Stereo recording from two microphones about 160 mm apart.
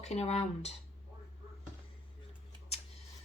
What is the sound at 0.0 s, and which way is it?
Speech, 40° left (ahead or behind).